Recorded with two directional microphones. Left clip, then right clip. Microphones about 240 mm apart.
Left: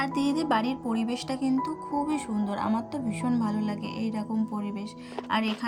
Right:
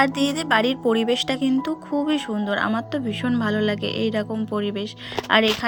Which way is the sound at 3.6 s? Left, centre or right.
Right.